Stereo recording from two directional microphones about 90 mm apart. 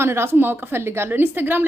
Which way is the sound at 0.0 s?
30° right (ahead or behind).